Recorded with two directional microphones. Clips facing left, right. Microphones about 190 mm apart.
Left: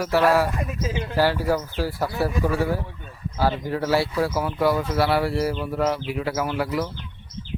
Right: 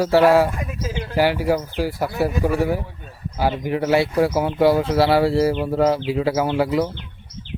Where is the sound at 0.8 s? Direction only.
Centre (ahead or behind).